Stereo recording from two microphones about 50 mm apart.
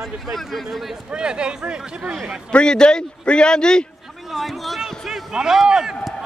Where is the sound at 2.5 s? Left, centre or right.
Centre.